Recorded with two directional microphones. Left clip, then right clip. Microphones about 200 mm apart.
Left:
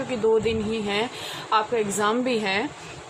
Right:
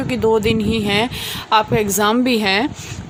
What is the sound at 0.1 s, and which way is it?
A woman's voice, 55° right (ahead or behind).